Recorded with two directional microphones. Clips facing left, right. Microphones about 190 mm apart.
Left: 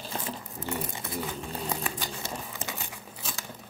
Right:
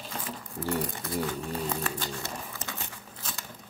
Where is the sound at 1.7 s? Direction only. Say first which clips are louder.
Right 1 dB; 15° left (ahead or behind).